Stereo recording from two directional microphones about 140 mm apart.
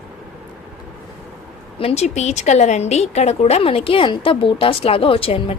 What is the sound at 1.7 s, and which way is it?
Speech, 45° left (ahead or behind).